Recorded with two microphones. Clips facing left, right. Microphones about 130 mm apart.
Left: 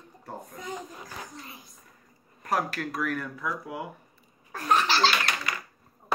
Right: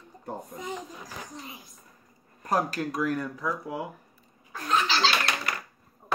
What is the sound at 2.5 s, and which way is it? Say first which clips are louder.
Speech: right 2 dB; 30° right (ahead or behind).